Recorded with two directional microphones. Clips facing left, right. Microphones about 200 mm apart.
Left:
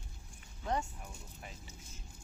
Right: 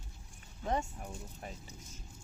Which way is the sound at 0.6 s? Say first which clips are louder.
Right 2 dB; 20° right (ahead or behind).